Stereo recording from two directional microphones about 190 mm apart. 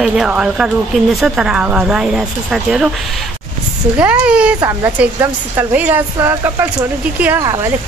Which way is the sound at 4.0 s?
5° right (ahead or behind).